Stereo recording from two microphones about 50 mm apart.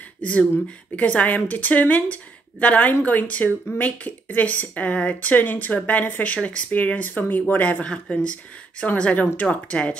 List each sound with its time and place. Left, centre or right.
0.2 s speech: left
5.3 s speech: left
7.8 s speech: left